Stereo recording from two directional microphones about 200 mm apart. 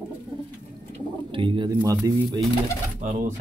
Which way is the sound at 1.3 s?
25° right (ahead or behind).